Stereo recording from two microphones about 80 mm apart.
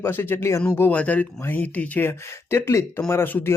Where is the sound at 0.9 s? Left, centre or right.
Centre.